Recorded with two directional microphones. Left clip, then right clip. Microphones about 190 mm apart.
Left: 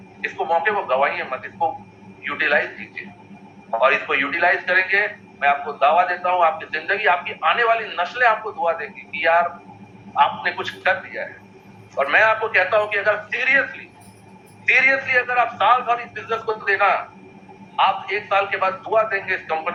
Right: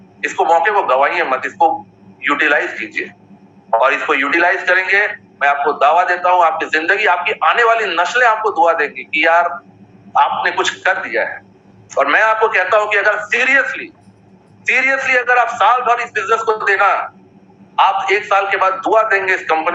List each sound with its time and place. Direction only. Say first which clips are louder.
0.2 s a man's voice: right 8 dB; 40° right (ahead or behind)